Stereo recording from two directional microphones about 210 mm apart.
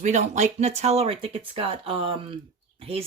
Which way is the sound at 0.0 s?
35° right (ahead or behind).